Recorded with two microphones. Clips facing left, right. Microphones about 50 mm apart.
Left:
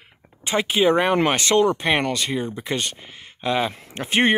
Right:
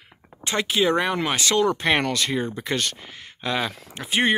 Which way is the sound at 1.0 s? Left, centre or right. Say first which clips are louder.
Left 4 dB; left.